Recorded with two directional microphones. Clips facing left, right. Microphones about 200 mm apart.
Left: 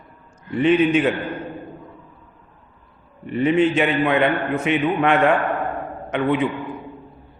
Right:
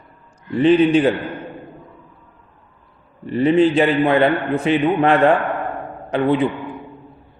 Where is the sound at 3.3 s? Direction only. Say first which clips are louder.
Right 3 dB; 35° right (ahead or behind).